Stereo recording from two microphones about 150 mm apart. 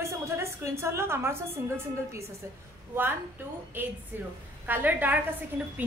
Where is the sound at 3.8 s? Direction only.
15° right (ahead or behind).